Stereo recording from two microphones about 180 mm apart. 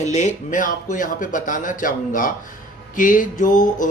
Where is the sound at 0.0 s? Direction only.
40° left (ahead or behind).